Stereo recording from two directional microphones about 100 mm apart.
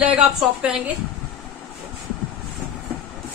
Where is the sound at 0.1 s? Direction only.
10° right (ahead or behind).